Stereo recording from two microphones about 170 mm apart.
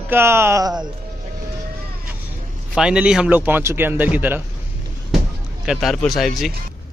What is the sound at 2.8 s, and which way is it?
Speech, 5° right (ahead or behind).